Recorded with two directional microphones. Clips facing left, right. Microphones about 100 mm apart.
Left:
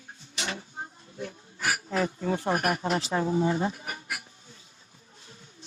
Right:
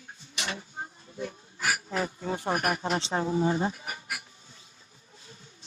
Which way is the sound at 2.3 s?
20° right (ahead or behind).